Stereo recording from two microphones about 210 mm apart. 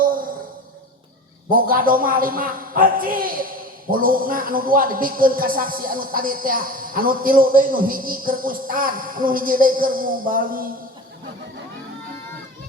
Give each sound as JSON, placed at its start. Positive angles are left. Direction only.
{"t": 1.5, "sound": "a man's voice", "side_deg": -45}